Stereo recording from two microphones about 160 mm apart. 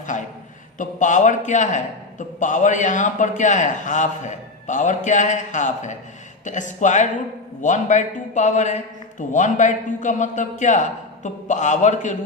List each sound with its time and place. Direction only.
0.8 s a man's voice: 50° left (ahead or behind)